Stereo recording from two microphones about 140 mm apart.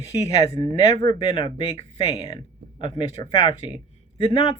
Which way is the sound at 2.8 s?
35° left (ahead or behind).